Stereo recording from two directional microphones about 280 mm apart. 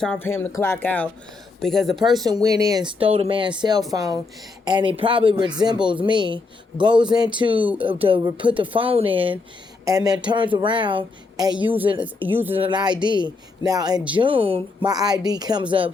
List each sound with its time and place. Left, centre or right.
0.0 s speech: centre
2.2 s speech: centre
12.5 s speech: centre